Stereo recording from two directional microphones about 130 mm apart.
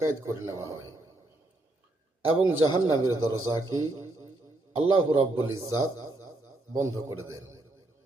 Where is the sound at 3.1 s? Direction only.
25° right (ahead or behind).